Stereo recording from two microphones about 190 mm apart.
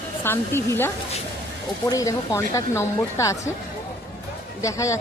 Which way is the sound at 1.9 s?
15° left (ahead or behind).